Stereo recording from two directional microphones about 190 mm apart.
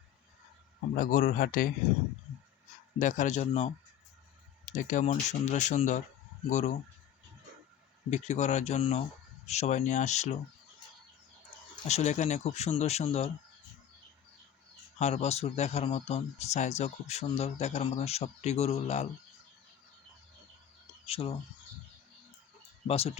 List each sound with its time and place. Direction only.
0.9 s speech: 50° left (ahead or behind)
3.0 s speech: 40° left (ahead or behind)
8.1 s speech: 35° left (ahead or behind)
11.9 s speech: 35° left (ahead or behind)
14.9 s speech: 35° left (ahead or behind)
21.1 s speech: 30° left (ahead or behind)
22.9 s speech: 30° left (ahead or behind)